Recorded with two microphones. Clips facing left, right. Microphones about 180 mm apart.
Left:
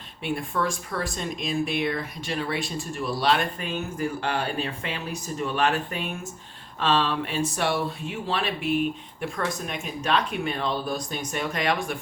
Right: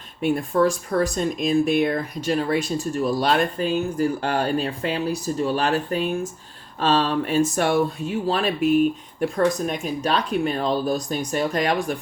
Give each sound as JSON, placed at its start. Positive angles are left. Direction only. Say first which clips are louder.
{"t": 0.2, "sound": "speech", "louder": "right 8 dB", "side_deg": -40}